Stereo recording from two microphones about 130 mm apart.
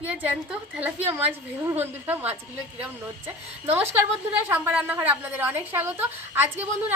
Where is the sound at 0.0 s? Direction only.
10° right (ahead or behind).